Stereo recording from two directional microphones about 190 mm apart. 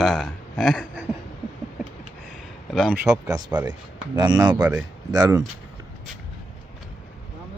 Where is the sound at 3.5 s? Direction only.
10° right (ahead or behind).